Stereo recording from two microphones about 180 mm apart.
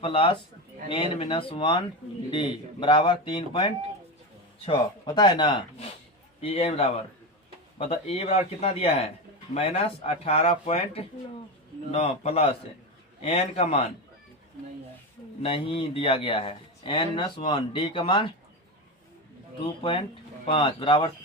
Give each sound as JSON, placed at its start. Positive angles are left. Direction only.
{"t": 0.0, "sound": "a man's voice", "side_deg": 30}
{"t": 15.4, "sound": "a man's voice", "side_deg": 30}
{"t": 19.5, "sound": "a man's voice", "side_deg": 30}